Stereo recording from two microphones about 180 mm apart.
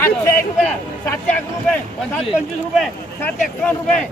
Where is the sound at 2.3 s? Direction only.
5° right (ahead or behind).